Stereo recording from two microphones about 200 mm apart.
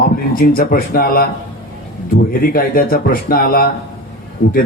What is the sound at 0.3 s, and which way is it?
A man's voice, 45° left (ahead or behind).